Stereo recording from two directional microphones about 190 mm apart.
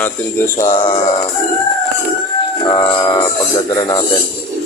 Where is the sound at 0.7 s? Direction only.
25° left (ahead or behind).